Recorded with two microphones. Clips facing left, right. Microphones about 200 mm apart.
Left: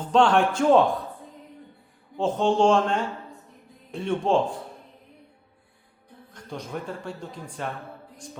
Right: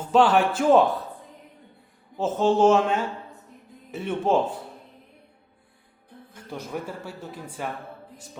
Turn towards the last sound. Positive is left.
turn(degrees=-5)  # may be behind; listen again after turning